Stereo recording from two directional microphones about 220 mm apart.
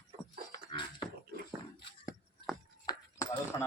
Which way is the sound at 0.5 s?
20° left (ahead or behind).